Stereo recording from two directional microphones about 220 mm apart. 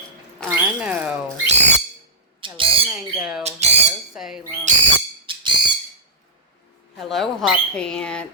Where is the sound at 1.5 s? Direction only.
30° right (ahead or behind).